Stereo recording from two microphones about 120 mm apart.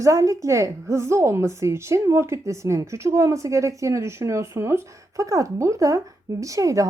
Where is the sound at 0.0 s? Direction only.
25° right (ahead or behind).